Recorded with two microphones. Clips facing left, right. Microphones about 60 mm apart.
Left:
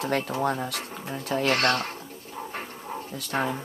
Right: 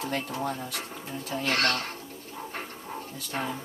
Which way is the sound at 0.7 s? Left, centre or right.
Left.